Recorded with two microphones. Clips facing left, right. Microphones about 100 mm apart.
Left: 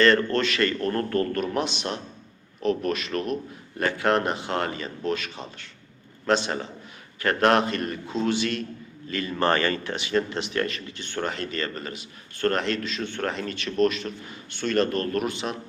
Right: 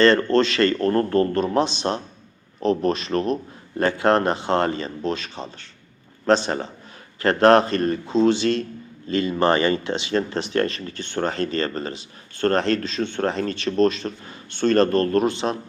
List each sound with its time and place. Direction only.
0.0 s speech: 30° right (ahead or behind)